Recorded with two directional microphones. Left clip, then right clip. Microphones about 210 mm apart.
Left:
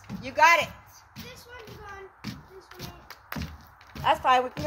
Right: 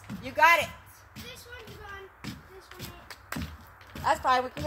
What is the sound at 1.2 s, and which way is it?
Music, 45° left (ahead or behind).